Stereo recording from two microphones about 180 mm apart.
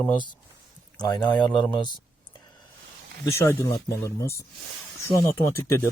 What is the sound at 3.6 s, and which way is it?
Speech, 15° left (ahead or behind).